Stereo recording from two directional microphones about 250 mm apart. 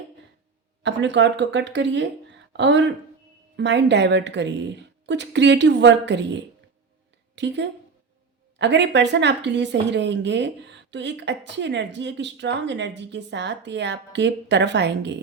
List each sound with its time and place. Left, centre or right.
0.8 s a woman's voice: right